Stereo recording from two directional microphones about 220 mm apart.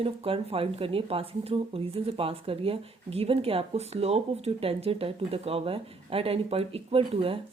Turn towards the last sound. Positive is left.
turn(degrees=-25)  # may be behind; listen again after turning